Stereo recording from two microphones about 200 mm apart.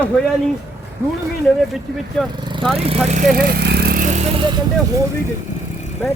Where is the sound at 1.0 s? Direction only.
10° right (ahead or behind).